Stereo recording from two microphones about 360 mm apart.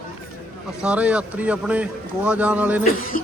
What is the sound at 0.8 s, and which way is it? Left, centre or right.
Speech, centre.